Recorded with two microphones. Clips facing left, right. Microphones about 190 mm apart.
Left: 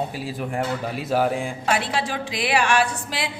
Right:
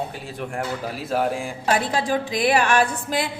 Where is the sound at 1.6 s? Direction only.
45° right (ahead or behind).